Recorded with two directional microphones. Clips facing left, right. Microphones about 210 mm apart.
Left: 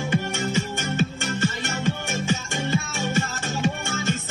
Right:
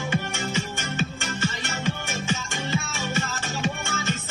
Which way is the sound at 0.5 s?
45° left (ahead or behind).